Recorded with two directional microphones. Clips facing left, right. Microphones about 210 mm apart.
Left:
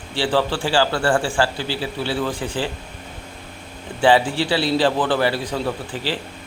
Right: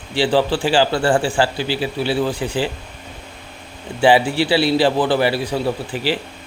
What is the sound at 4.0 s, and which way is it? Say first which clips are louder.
A man's voice: right 2 dB; 10° right (ahead or behind).